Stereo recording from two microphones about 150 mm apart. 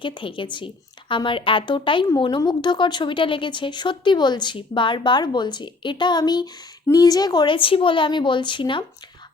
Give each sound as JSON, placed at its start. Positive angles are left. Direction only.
{"t": 0.0, "sound": "speech", "side_deg": 35}